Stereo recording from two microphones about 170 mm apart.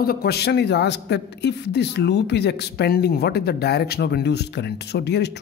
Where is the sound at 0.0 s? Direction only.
65° left (ahead or behind).